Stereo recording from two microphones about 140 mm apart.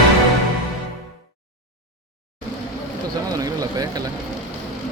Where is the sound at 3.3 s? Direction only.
25° right (ahead or behind).